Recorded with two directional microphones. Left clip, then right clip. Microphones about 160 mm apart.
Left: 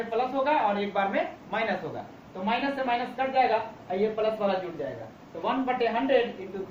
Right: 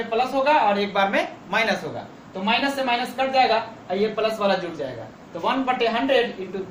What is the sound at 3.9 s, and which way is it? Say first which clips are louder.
Speech: right 3 dB; 30° right (ahead or behind).